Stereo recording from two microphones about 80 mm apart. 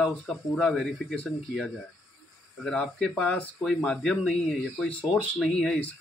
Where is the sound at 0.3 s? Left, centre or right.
Centre.